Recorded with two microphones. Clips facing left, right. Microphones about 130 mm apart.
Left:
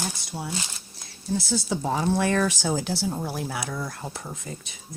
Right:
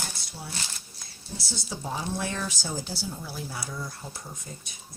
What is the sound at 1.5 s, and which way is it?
Speech, 75° left (ahead or behind).